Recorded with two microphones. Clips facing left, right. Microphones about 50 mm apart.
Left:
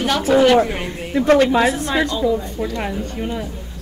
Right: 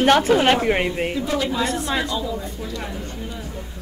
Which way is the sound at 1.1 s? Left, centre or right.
Left.